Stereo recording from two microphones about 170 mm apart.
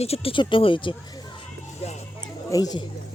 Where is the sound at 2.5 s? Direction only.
20° left (ahead or behind).